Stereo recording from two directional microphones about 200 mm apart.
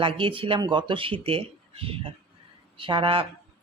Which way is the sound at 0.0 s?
25° right (ahead or behind).